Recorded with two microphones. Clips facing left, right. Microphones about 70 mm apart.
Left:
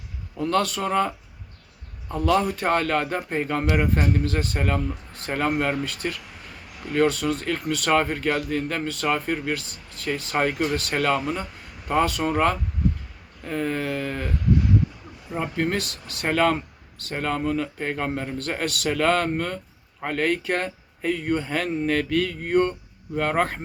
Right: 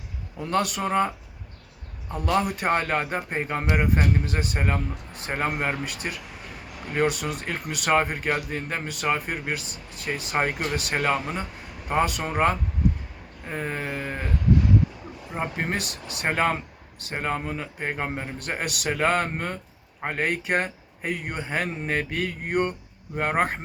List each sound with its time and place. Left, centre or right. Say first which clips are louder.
0.3 s speech: left 2 dB; centre
2.1 s speech: left 3 dB; centre
15.3 s speech: left 3 dB; right